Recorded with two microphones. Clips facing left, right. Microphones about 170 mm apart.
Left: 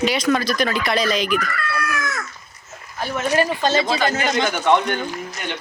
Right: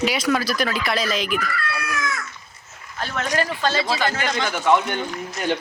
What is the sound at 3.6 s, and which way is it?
Speech, 20° left (ahead or behind).